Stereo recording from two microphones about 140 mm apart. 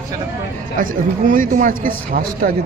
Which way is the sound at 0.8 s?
75° right (ahead or behind).